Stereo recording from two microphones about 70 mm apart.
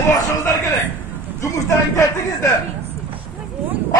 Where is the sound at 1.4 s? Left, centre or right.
Left.